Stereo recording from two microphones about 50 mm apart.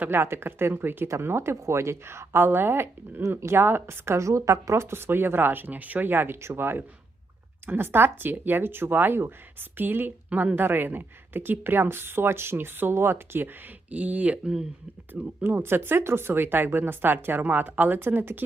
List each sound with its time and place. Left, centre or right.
0.1 s speech: right
1.2 s speech: right
3.2 s speech: right
3.6 s speech: right
13.9 s speech: right
15.6 s speech: right